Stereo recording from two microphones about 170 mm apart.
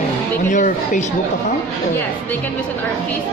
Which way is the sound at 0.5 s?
45° left (ahead or behind).